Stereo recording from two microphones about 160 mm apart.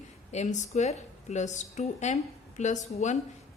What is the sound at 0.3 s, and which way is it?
A woman's voice, 45° left (ahead or behind).